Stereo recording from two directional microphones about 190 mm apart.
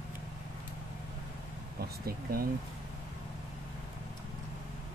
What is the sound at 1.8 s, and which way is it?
Speech, 50° right (ahead or behind).